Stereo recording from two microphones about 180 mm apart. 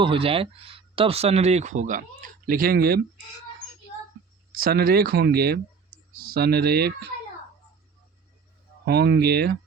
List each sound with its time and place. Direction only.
0.0 s speech: 30° right (ahead or behind); by 3.0 s 60° right (ahead or behind)
4.5 s speech: 55° right (ahead or behind)
8.8 s speech: 65° right (ahead or behind)